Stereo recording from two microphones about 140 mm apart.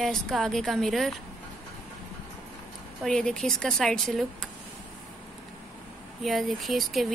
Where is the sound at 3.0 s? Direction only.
5° left (ahead or behind).